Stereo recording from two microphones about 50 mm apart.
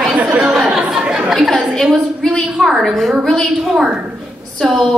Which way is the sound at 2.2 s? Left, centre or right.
Centre.